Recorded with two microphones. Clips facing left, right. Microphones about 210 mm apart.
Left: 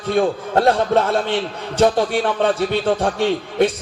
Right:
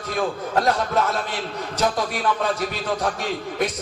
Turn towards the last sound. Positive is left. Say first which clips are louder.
# left 8 dB
turn(degrees=30)  # may be behind; listen again after turning